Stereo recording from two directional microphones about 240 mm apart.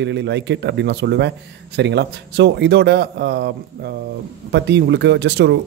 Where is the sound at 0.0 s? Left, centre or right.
Right.